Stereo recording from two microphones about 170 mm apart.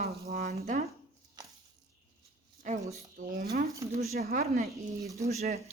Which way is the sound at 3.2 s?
55° right (ahead or behind).